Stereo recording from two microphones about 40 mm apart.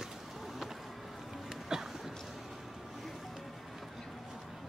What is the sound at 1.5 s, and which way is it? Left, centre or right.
Boat, centre.